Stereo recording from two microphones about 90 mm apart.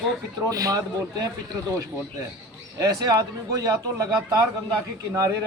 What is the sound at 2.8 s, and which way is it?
Speech, 45° right (ahead or behind).